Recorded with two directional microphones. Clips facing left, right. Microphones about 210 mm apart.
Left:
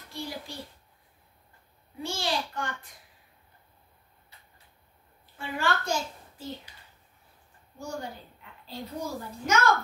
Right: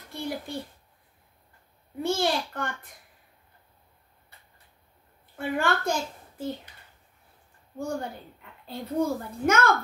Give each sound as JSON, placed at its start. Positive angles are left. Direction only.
{"t": 0.1, "sound": "a sound", "side_deg": -55}
{"t": 2.0, "sound": "a woman's voice", "side_deg": -55}
{"t": 5.3, "sound": "a child's voice", "side_deg": -55}
{"t": 8.6, "sound": "a woman's voice", "side_deg": -55}